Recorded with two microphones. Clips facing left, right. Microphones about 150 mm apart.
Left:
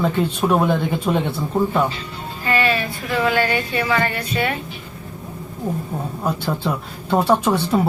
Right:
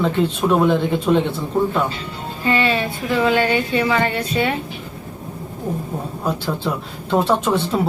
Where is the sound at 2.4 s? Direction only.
25° right (ahead or behind).